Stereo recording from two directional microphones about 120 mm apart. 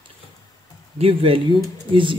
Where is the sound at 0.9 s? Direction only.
50° right (ahead or behind).